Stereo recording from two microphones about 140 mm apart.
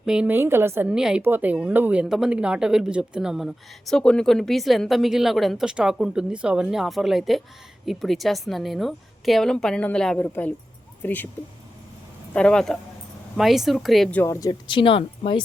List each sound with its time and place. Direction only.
0.0 s a woman's voice: 5° right (ahead or behind)
0.9 s speech: 5° right (ahead or behind); by 11.3 s 15° left (ahead or behind)
12.3 s speech: 5° left (ahead or behind)
14.2 s speech: 25° left (ahead or behind)
14.7 s speech: 40° left (ahead or behind)